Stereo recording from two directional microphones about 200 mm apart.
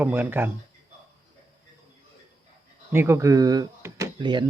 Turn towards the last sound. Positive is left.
turn(degrees=-25)  # may be behind; listen again after turning